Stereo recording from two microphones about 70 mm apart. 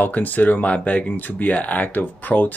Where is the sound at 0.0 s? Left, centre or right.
Left.